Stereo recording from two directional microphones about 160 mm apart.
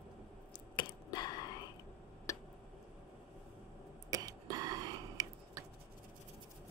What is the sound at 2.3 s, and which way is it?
Tick, 20° left (ahead or behind).